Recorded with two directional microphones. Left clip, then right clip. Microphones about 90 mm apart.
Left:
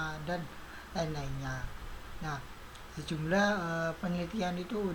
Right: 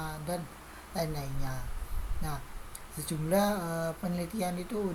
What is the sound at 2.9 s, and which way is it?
Speech, 25° right (ahead or behind).